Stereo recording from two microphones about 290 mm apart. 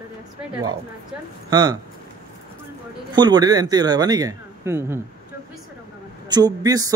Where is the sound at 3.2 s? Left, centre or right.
Centre.